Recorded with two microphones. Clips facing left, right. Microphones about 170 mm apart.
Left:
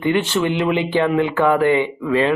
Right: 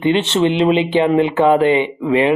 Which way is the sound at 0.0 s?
25° right (ahead or behind).